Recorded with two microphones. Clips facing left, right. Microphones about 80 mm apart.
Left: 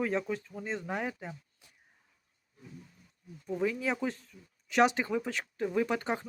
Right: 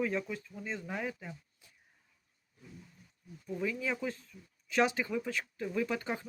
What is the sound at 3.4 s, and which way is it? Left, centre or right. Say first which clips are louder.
Speech: left 4 dB; left.